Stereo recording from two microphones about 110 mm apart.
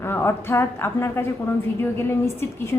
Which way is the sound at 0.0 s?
20° left (ahead or behind).